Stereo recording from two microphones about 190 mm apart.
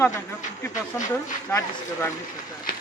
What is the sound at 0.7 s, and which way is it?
Speech, 40° left (ahead or behind).